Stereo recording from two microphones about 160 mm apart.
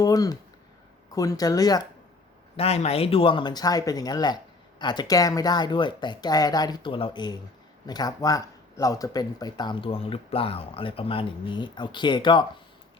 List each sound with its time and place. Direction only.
0.0 s speech: 25° left (ahead or behind)
2.6 s speech: 40° left (ahead or behind)